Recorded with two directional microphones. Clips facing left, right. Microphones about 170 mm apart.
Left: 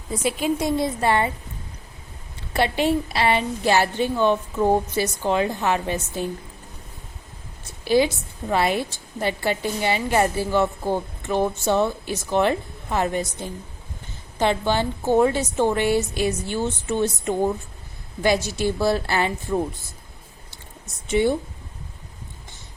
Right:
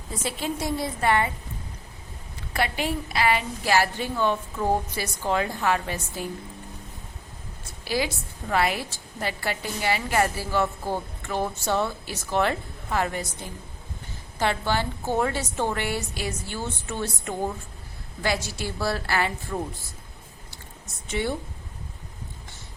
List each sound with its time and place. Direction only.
0.3 s a woman's voice: 15° left (ahead or behind)
2.5 s a woman's voice: 25° left (ahead or behind)
7.9 s a woman's voice: 25° left (ahead or behind)
21.1 s speech: 20° left (ahead or behind)